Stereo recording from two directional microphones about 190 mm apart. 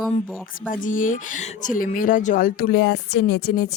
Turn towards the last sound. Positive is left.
turn(degrees=55)  # may be behind; listen again after turning